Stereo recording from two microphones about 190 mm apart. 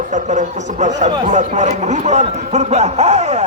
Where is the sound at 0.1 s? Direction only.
40° right (ahead or behind).